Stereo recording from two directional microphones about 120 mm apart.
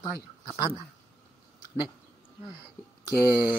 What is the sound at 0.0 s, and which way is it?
Speech, 35° left (ahead or behind).